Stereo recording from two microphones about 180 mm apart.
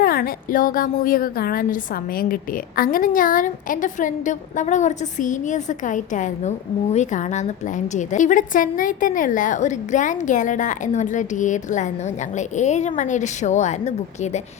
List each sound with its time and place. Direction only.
0.0 s a woman's voice: 55° left (ahead or behind); by 14.4 s 40° left (ahead or behind)